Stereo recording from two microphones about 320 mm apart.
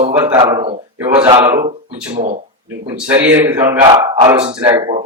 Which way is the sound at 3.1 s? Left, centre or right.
Centre.